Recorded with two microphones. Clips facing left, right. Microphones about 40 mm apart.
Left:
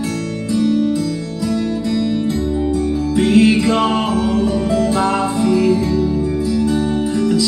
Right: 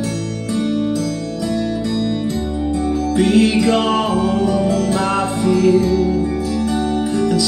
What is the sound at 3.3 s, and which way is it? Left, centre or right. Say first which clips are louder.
Music: left 2 dB; left.